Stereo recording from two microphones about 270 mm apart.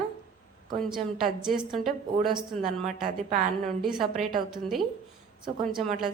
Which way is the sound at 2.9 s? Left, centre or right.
Right.